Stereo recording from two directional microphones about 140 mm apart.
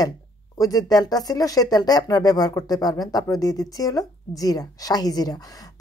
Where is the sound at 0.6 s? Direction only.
25° left (ahead or behind).